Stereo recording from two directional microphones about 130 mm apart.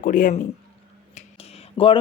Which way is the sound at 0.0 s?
90° left.